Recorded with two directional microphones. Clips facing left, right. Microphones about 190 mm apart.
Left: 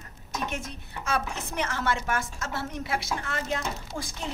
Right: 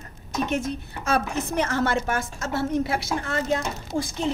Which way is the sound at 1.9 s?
30° right (ahead or behind).